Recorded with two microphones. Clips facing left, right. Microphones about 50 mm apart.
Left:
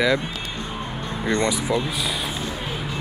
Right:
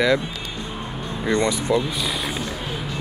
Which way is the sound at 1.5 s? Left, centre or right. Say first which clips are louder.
Right 2 dB; centre.